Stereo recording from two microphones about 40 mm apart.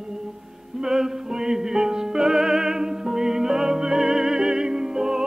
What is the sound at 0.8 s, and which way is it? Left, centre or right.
Music, centre.